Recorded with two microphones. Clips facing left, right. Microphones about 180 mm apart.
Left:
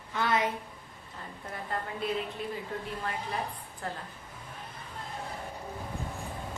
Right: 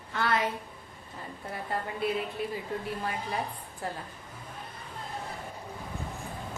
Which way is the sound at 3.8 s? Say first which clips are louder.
Right 2 dB; 5° right (ahead or behind).